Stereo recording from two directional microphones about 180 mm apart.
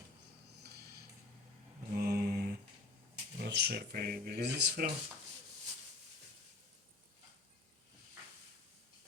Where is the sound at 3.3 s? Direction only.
70° right (ahead or behind).